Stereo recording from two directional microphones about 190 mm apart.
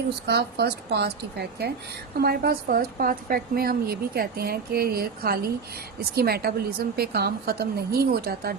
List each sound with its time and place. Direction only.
0.3 s a woman's voice: 60° right (ahead or behind)